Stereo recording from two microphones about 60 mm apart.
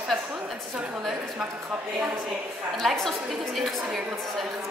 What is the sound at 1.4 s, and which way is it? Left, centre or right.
Speech, centre.